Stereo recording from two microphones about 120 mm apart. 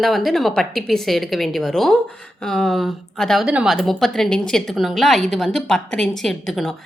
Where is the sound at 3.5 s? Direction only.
10° right (ahead or behind).